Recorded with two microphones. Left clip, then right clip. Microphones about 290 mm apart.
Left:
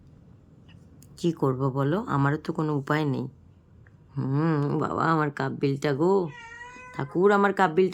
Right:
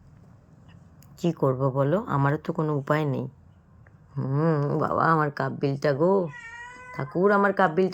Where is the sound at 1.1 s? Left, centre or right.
Centre.